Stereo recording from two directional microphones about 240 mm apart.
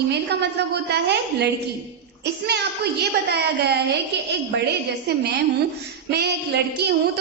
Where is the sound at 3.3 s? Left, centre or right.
Right.